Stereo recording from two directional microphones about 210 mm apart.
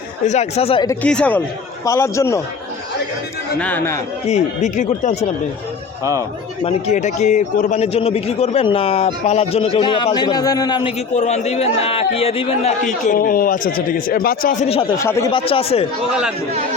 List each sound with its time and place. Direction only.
0.3 s a man's voice: 30° left (ahead or behind)
0.9 s a man's voice: 5° left (ahead or behind)
3.6 s a man's voice: 10° left (ahead or behind)
4.3 s speech: 35° left (ahead or behind)
6.7 s a man's voice: 30° left (ahead or behind)
14.7 s a man's voice: 25° left (ahead or behind)
15.0 s a man's voice: 10° left (ahead or behind)
15.3 s a man's voice: 25° left (ahead or behind)